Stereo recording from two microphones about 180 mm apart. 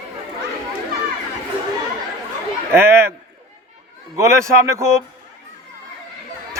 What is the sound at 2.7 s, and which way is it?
Speech, 15° right (ahead or behind).